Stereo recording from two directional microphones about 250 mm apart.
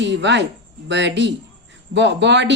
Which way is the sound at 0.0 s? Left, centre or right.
Right.